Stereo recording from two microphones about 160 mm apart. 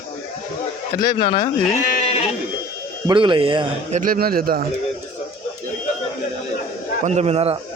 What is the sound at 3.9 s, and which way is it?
Speech, 55° right (ahead or behind).